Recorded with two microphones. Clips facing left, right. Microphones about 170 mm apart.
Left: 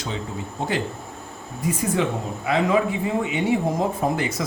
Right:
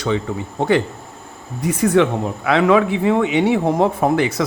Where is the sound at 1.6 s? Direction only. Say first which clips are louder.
Right 8 dB; 75° right (ahead or behind).